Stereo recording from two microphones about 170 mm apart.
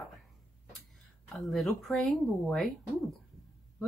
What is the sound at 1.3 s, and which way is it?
Speech, centre (ahead or behind).